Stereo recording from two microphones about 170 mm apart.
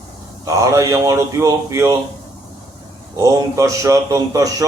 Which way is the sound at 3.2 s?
20° right (ahead or behind).